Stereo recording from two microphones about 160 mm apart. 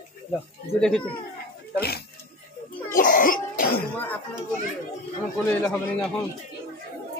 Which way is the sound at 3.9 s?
10° left (ahead or behind).